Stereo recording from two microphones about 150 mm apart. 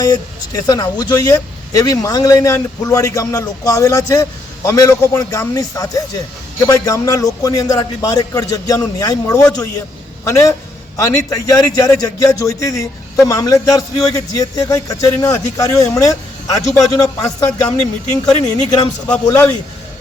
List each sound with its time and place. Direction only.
0.0 s a man's voice: 25° left (ahead or behind)